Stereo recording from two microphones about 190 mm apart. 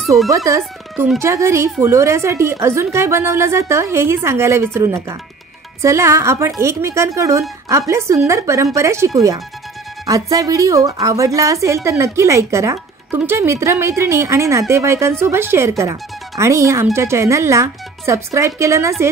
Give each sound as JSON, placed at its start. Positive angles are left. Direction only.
{"t": 0.5, "sound": "a woman's voice", "side_deg": -15}